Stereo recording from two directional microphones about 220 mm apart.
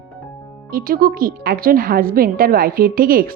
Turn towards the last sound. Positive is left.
turn(degrees=-40)  # may be behind; listen again after turning